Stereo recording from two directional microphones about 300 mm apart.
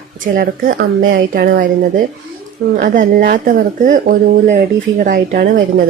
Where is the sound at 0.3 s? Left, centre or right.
Right.